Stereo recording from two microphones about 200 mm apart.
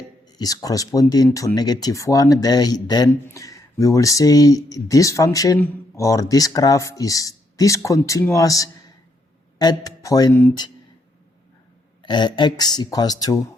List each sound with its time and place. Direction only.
0.3 s speech: 20° left (ahead or behind)
12.0 s speech: 25° left (ahead or behind)